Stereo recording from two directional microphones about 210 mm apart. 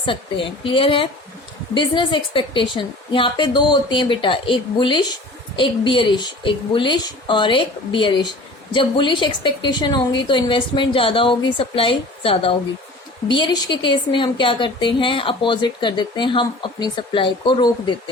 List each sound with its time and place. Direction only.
0.0 s a woman's voice: 25° left (ahead or behind)